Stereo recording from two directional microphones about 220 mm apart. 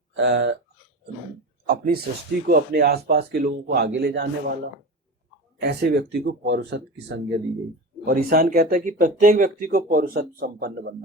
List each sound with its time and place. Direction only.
0.1 s speech: 55° right (ahead or behind)
1.6 s a sound: 45° right (ahead or behind)
2.5 s speech: 45° right (ahead or behind)
5.5 s speech: 50° right (ahead or behind)
8.0 s speech: 40° right (ahead or behind)